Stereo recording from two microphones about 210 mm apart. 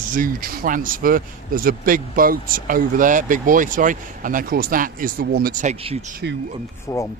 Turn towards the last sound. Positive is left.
turn(degrees=15)  # may be behind; listen again after turning